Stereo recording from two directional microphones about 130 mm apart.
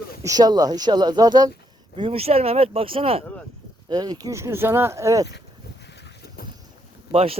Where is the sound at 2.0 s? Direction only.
50° right (ahead or behind).